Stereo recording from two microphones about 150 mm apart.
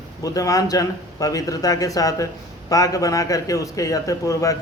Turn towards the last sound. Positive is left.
turn(degrees=20)  # may be behind; listen again after turning